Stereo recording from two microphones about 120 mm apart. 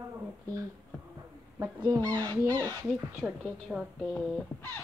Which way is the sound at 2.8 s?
5° right (ahead or behind).